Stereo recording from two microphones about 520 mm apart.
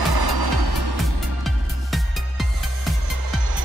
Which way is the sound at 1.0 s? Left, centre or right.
Centre.